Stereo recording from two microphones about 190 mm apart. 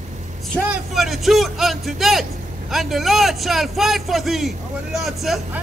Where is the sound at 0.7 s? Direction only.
Centre (ahead or behind).